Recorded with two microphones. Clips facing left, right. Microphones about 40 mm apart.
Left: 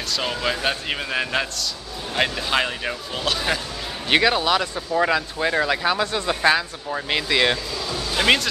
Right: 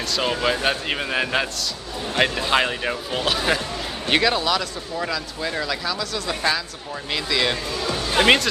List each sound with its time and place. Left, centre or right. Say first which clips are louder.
0.1 s a man's voice: right 2 dB; centre
4.1 s speech: left 2 dB; centre
7.7 s music: right 3 dB; right